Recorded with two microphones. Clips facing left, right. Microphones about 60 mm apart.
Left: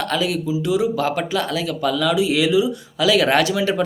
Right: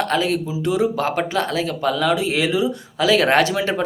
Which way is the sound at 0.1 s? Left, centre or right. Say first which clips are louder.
Right 1 dB; right.